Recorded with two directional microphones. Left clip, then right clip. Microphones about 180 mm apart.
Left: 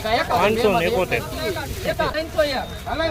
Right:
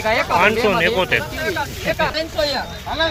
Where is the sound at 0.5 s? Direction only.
35° right (ahead or behind).